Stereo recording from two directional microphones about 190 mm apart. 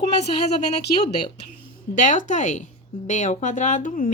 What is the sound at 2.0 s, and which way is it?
A woman's voice, 40° left (ahead or behind).